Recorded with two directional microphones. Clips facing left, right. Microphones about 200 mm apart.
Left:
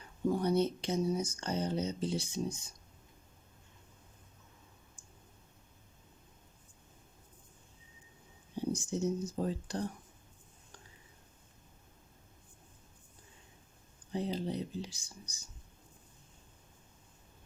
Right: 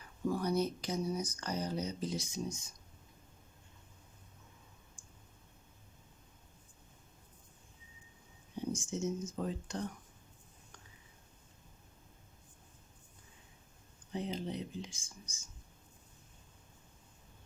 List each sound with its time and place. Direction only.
0.0 s speech: 25° left (ahead or behind)
8.7 s speech: 35° left (ahead or behind)
14.1 s speech: 35° left (ahead or behind)